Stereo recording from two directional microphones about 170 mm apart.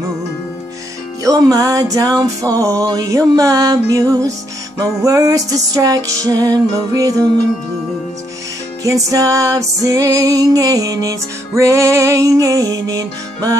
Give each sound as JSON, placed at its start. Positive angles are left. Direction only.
{"t": 1.2, "sound": "music", "side_deg": -20}
{"t": 8.8, "sound": "music", "side_deg": -20}